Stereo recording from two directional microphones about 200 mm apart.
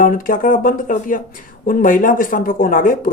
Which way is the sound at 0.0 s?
45° left (ahead or behind).